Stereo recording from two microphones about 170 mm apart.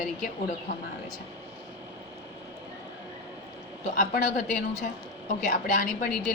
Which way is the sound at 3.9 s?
50° left (ahead or behind).